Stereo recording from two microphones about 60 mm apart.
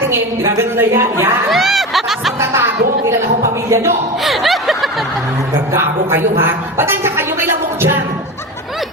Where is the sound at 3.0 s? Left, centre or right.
Right.